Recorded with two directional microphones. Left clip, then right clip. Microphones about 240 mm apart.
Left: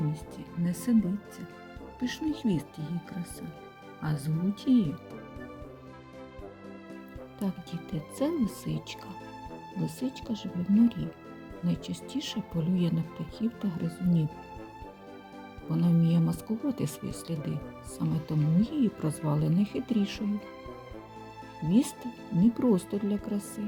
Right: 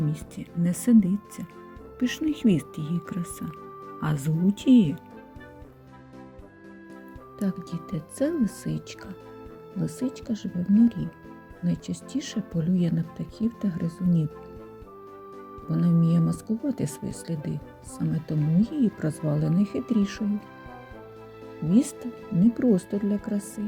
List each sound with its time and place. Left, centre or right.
0.1 s speech: centre
2.0 s speech: centre
7.3 s speech: centre
15.7 s speech: centre
21.7 s speech: centre